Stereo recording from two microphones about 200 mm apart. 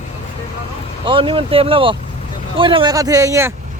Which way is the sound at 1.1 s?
25° right (ahead or behind).